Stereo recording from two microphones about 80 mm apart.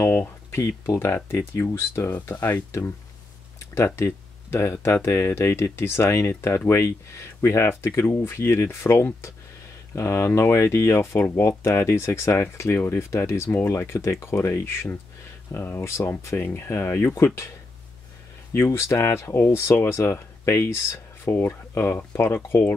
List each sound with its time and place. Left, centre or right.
0.5 s speech: left
3.7 s speech: left
18.5 s speech: left